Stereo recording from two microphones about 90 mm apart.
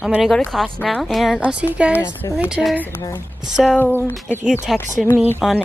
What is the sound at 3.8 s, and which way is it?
Speech, 20° left (ahead or behind).